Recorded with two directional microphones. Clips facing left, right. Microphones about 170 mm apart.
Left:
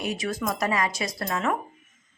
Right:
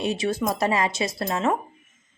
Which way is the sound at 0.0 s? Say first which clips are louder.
Right 4 dB; 25° right (ahead or behind).